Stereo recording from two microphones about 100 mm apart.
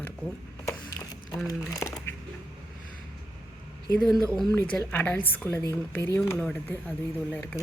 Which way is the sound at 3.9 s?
5° left (ahead or behind).